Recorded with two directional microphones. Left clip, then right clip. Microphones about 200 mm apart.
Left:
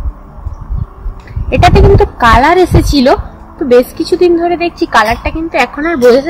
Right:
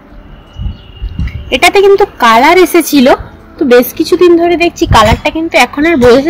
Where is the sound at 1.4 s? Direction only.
10° right (ahead or behind); by 3.2 s 25° right (ahead or behind).